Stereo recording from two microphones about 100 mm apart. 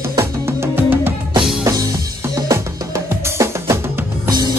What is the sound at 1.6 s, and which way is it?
Music, 35° right (ahead or behind).